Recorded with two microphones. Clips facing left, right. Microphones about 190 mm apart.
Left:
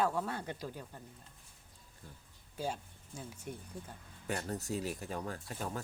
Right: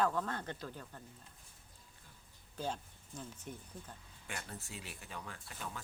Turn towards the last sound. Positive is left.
turn(degrees=40)  # may be behind; listen again after turning